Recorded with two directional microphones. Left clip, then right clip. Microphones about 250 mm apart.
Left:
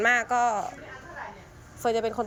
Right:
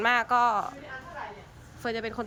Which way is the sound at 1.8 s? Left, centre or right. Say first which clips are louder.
Left 6 dB; centre.